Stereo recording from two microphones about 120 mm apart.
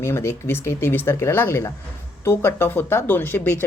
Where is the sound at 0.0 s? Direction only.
20° left (ahead or behind).